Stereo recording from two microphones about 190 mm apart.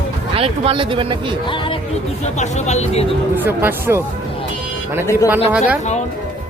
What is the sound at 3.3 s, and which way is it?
Speech, 10° right (ahead or behind).